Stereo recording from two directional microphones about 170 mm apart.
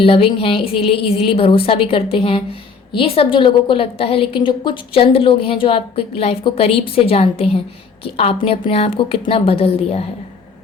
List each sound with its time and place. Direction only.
0.0 s a woman's voice: 35° left (ahead or behind)